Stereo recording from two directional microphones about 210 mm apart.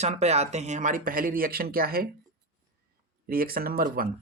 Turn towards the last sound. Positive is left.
turn(degrees=-45)  # may be behind; listen again after turning